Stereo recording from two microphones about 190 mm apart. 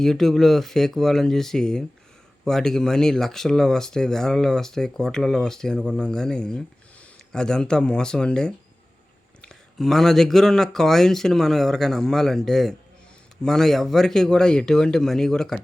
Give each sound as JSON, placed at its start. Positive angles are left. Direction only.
{"t": 0.0, "sound": "speech", "side_deg": 0}